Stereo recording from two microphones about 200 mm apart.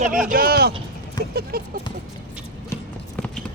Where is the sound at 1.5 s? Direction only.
50° right (ahead or behind).